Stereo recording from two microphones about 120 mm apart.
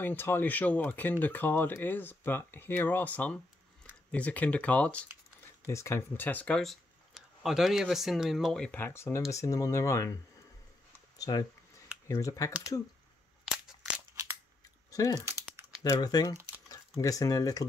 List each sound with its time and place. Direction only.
0.0 s speech: 15° left (ahead or behind)
5.7 s speech: 25° left (ahead or behind); by 8.8 s 5° left (ahead or behind)
8.8 s speech: 20° left (ahead or behind)
11.1 s speech: 30° left (ahead or behind)
14.9 s a sound: 30° left (ahead or behind)
15.8 s speech: 35° left (ahead or behind)